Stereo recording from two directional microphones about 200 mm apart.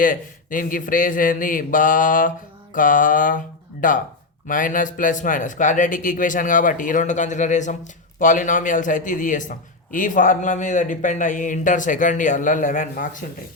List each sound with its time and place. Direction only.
0.0 s a man's voice: 45° left (ahead or behind)